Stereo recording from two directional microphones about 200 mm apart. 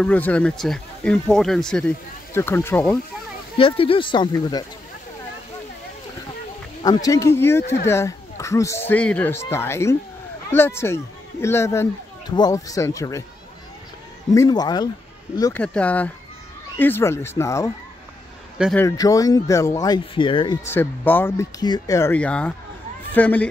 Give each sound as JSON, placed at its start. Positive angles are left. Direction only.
{"t": 0.0, "sound": "speech", "side_deg": 5}
{"t": 3.5, "sound": "speech", "side_deg": 25}
{"t": 6.8, "sound": "speech", "side_deg": 20}
{"t": 14.3, "sound": "speech", "side_deg": 20}
{"t": 15.6, "sound": "speech", "side_deg": 5}
{"t": 18.8, "sound": "speech", "side_deg": 15}
{"t": 20.6, "sound": "speech", "side_deg": 10}